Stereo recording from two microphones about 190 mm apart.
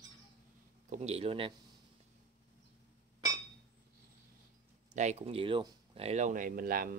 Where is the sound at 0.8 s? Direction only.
35° right (ahead or behind).